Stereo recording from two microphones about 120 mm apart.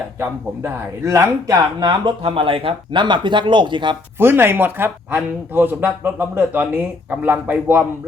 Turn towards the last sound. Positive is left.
turn(degrees=-15)  # may be behind; listen again after turning